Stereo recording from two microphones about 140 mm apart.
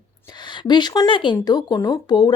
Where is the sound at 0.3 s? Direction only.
30° left (ahead or behind).